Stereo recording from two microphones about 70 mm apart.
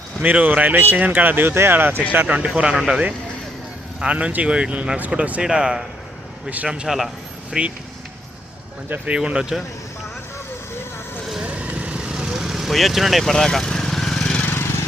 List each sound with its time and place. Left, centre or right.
0.2 s speech: right
2.2 s speech: centre
4.0 s speech: centre
6.8 s speech: centre
9.1 s speech: centre
11.4 s vehicle: centre
14.4 s vehicle: left